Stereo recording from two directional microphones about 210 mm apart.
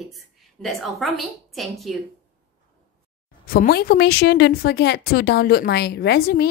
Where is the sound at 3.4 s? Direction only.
45° left (ahead or behind).